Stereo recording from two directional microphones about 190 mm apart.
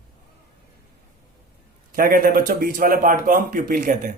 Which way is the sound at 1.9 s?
50° right (ahead or behind).